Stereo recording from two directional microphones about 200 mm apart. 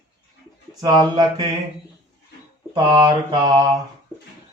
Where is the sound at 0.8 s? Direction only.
20° right (ahead or behind).